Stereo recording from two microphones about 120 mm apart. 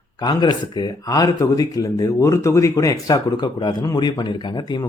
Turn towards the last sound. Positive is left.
turn(degrees=35)  # may be behind; listen again after turning